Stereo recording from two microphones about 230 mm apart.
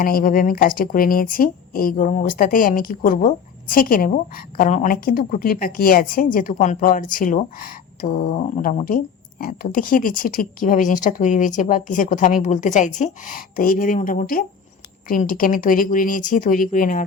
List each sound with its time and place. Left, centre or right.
0.0 s speech: left